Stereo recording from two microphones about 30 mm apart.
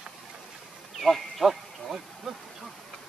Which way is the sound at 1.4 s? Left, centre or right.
Centre.